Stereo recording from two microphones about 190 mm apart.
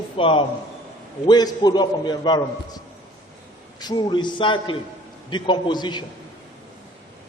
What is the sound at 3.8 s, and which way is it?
A man's voice, 20° left (ahead or behind).